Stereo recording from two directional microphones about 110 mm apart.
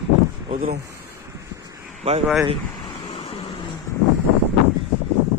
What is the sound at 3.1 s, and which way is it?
Vehicle, 70° left (ahead or behind).